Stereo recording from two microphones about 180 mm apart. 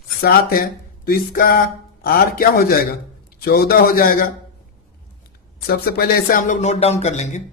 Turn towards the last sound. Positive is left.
turn(degrees=40)  # may be behind; listen again after turning